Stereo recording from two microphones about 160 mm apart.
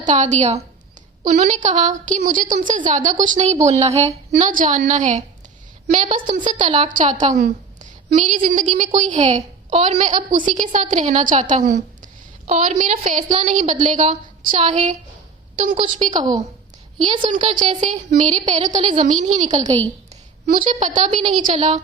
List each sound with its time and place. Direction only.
0.0 s a woman's voice: 50° right (ahead or behind)
15.7 s a woman's voice: 30° right (ahead or behind)
17.1 s a woman's voice: 50° right (ahead or behind)
17.4 s speech: 30° right (ahead or behind)
18.1 s a woman's voice: 45° right (ahead or behind)